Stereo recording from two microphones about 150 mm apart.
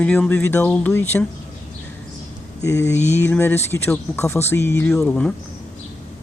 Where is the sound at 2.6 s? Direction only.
20° left (ahead or behind).